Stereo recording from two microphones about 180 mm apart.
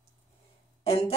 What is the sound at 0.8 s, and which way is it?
Speech, 35° left (ahead or behind).